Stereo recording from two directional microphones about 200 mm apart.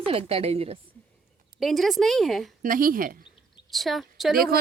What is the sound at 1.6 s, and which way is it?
Speech, centre (ahead or behind).